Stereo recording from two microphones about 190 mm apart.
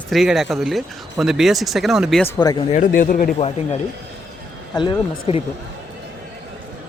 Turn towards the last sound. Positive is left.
turn(degrees=25)  # may be behind; listen again after turning